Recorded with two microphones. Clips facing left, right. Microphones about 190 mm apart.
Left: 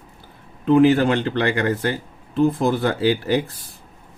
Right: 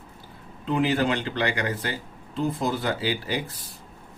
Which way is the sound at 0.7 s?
55° left (ahead or behind).